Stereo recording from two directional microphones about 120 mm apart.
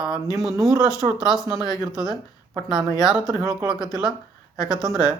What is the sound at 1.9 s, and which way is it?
Speech, 5° right (ahead or behind).